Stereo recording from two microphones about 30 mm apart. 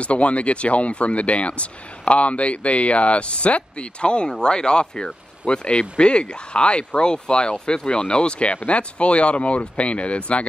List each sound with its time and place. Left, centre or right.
0.0 s speech: left